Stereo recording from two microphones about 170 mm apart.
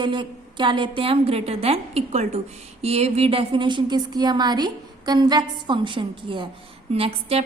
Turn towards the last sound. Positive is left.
turn(degrees=-35)  # may be behind; listen again after turning